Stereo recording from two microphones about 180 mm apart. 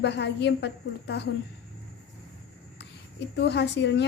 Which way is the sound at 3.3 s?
70° left (ahead or behind).